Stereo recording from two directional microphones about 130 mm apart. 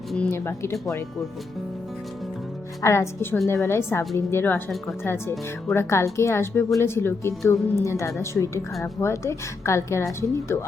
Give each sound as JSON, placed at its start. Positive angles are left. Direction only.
{"t": 0.3, "sound": "a woman's voice", "side_deg": 20}
{"t": 2.8, "sound": "a woman's voice", "side_deg": 20}